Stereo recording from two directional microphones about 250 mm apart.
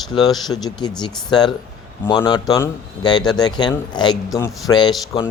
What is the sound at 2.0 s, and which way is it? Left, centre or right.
Speech, centre.